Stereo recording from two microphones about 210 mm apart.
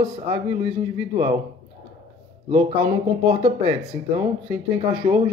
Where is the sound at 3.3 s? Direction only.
30° right (ahead or behind).